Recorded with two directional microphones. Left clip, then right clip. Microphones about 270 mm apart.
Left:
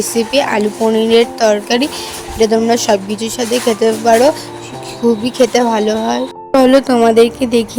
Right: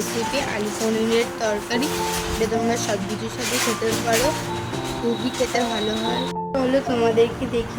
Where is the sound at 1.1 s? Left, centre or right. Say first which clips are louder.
Left 11 dB; left.